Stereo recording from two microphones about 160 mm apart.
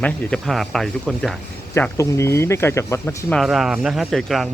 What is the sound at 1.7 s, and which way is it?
Speech, 15° left (ahead or behind).